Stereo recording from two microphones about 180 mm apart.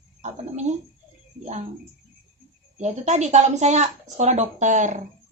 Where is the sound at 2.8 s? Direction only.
40° right (ahead or behind).